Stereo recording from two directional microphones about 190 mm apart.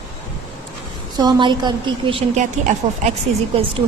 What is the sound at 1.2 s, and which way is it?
A woman's voice, 25° right (ahead or behind).